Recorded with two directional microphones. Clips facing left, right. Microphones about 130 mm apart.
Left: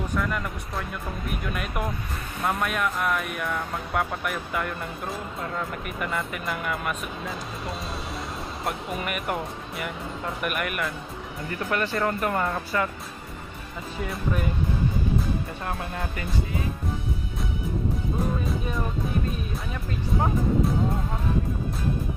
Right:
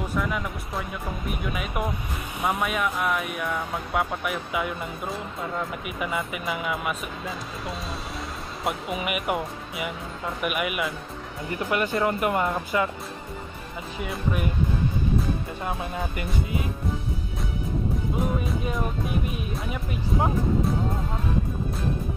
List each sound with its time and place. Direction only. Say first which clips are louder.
0.1 s speech: even; 5° right (ahead or behind)
14.0 s speech: even; centre (ahead or behind)
19.2 s speech: right 1 dB; 15° right (ahead or behind)